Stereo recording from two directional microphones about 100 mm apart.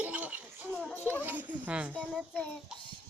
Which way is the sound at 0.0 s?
15° right (ahead or behind).